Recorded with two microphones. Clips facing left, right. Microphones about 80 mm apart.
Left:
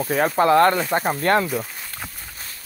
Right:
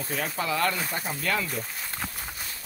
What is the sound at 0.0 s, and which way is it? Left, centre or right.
Speech, left.